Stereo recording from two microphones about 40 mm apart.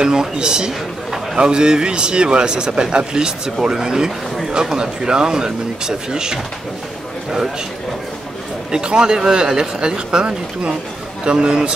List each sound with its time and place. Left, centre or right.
0.0 s a man's voice: centre
8.7 s a man's voice: right